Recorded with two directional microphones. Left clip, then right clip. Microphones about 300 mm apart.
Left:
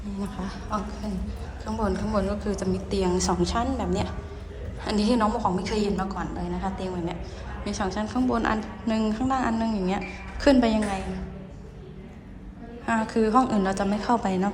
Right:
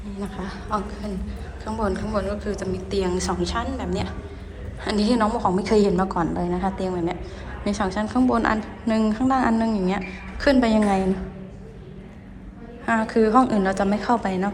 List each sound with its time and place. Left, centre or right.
0.2 s a woman's voice: centre
12.8 s a woman's voice: centre